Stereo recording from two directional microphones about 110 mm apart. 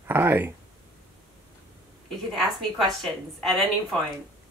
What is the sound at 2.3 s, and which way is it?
A woman's voice, centre (ahead or behind).